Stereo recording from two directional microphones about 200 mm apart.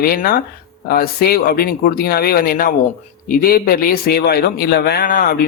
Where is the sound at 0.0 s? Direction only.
50° left (ahead or behind).